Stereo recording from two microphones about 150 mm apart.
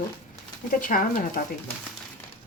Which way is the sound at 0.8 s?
65° left (ahead or behind).